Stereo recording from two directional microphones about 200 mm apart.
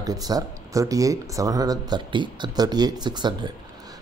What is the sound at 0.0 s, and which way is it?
Speech, 20° right (ahead or behind).